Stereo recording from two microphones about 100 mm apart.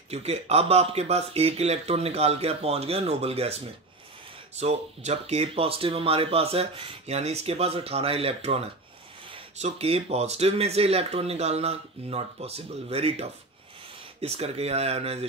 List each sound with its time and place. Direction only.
0.1 s speech: 90° right